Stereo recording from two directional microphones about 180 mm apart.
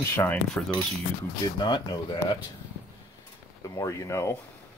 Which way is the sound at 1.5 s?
25° left (ahead or behind).